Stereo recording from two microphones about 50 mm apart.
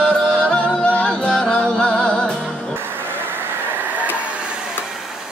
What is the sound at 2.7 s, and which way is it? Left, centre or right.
Vehicle, right.